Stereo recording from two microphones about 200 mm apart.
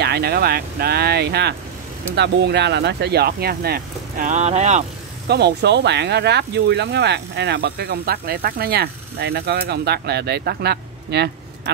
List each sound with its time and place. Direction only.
0.0 s speech: 55° right (ahead or behind)
4.3 s speech: 35° right (ahead or behind)
5.3 s speech: 55° right (ahead or behind)